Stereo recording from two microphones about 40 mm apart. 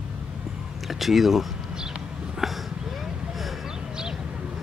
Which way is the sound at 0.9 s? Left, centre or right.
Centre.